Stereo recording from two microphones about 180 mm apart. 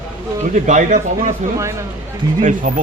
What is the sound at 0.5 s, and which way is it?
Speech, 45° right (ahead or behind).